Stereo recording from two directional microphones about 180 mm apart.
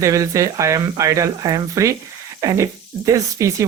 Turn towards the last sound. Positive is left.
turn(degrees=-15)  # may be behind; listen again after turning